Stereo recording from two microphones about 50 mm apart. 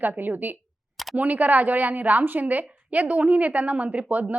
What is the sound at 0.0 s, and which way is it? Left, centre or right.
A woman's voice, right.